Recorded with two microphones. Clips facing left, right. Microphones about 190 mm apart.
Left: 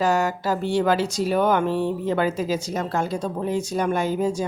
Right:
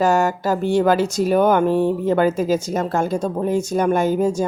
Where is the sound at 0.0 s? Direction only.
45° right (ahead or behind).